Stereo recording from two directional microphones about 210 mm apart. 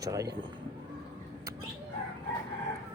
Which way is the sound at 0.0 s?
15° right (ahead or behind).